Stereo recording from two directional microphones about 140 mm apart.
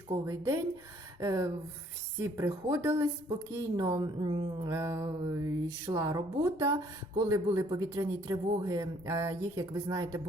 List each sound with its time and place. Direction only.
0.1 s a man's voice: 20° right (ahead or behind)